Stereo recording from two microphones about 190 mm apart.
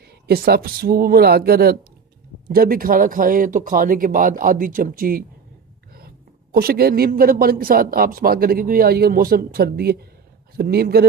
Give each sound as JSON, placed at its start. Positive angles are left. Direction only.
{"t": 0.3, "sound": "a woman's voice", "side_deg": -55}